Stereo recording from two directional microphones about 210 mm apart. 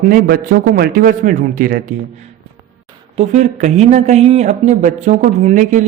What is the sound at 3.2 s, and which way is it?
A man's voice, 35° right (ahead or behind).